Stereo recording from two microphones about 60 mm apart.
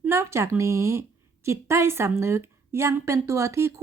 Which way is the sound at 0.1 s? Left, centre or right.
Right.